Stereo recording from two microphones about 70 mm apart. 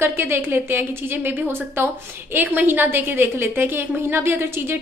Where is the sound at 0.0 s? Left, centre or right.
Right.